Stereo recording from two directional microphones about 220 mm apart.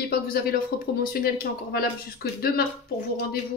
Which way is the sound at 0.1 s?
45° left (ahead or behind).